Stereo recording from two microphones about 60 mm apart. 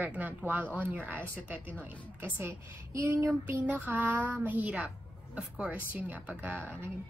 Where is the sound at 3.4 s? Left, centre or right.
Right.